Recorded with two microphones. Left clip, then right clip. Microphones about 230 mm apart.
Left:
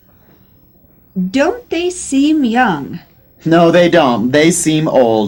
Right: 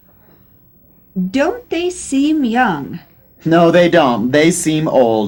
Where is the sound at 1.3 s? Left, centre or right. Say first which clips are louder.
Left 2 dB; right.